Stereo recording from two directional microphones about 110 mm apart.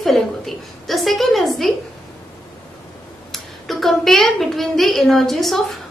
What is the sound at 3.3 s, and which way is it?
A woman's voice, centre (ahead or behind).